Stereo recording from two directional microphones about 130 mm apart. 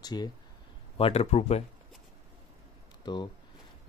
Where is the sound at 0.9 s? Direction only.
50° left (ahead or behind).